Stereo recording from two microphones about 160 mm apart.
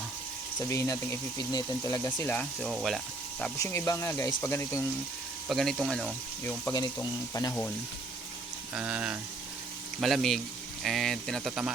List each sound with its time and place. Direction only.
0.7 s speech: 20° left (ahead or behind); by 3.0 s centre (ahead or behind)
3.6 s speech: 20° left (ahead or behind)
5.5 s speech: centre (ahead or behind)
6.4 s speech: 15° left (ahead or behind)
8.7 s speech: 10° right (ahead or behind)